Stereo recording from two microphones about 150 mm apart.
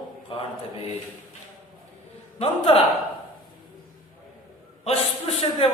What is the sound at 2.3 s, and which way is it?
Speech, 40° left (ahead or behind).